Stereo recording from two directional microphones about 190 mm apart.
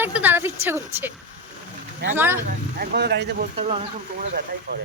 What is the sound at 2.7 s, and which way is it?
Speech, 60° right (ahead or behind).